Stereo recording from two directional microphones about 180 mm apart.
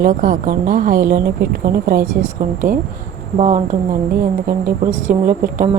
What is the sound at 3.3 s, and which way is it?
Speech, 40° right (ahead or behind).